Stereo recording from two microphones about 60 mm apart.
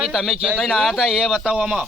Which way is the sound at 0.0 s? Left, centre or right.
Centre.